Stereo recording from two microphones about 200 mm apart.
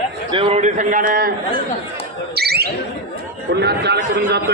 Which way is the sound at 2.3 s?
50° right (ahead or behind).